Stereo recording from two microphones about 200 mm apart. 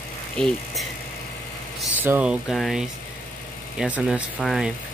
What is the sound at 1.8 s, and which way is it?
Speech, 5° right (ahead or behind).